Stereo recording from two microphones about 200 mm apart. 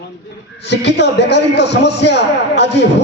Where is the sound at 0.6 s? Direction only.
60° left (ahead or behind).